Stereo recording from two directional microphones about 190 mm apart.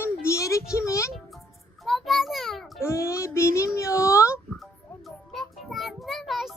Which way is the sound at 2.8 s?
15° left (ahead or behind).